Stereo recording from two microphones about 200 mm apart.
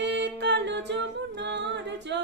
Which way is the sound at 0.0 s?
60° right (ahead or behind).